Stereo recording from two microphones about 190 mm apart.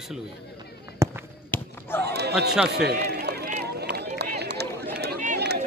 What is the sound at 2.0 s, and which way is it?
Speech, 60° right (ahead or behind).